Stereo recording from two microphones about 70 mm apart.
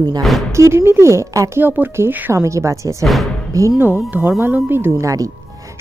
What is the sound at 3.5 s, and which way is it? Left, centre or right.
Speech, right.